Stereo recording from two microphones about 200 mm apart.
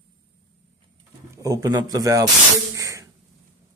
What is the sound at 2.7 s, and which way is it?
Sneeze, 15° right (ahead or behind).